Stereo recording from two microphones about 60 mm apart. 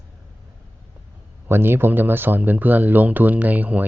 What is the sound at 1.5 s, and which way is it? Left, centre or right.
Speech, right.